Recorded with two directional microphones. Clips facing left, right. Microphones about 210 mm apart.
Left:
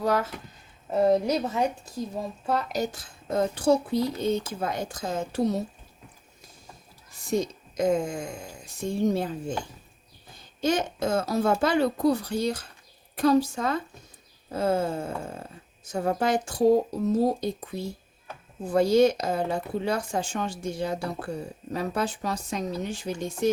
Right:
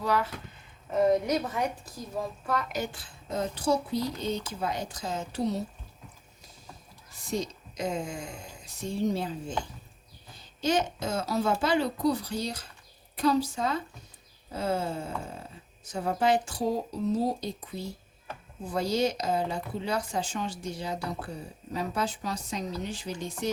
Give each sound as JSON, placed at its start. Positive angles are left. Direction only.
{"t": 0.0, "sound": "speech", "side_deg": 45}
{"t": 0.9, "sound": "a woman's voice", "side_deg": 30}
{"t": 7.3, "sound": "a woman's voice", "side_deg": 50}
{"t": 10.6, "sound": "a woman's voice", "side_deg": 50}
{"t": 18.7, "sound": "a woman's voice", "side_deg": 50}